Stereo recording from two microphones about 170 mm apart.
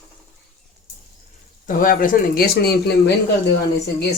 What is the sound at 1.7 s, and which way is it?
Speech, 50° left (ahead or behind).